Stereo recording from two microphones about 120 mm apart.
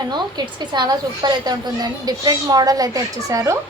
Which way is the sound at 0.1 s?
35° right (ahead or behind).